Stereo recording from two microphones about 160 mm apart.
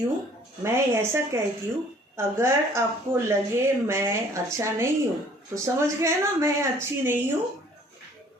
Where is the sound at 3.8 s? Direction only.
15° right (ahead or behind).